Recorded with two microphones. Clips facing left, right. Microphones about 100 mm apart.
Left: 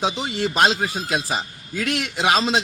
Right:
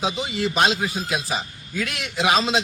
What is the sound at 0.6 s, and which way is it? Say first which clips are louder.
Speech: left 3 dB; 35° left (ahead or behind).